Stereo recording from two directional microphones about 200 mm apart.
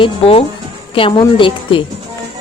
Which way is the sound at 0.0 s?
30° left (ahead or behind).